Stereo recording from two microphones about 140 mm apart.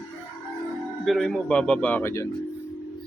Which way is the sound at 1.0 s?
Centre (ahead or behind).